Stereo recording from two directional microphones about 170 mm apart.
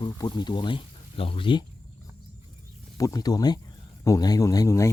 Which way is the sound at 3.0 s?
20° left (ahead or behind).